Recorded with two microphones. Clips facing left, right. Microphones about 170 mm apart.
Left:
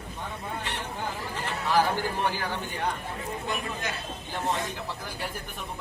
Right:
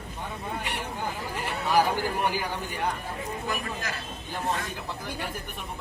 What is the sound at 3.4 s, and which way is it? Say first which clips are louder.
Speech: left 1 dB; 25° left (ahead or behind).